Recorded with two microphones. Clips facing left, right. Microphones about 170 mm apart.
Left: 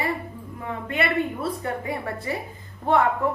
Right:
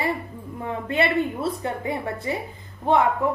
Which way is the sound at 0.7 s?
30° right (ahead or behind).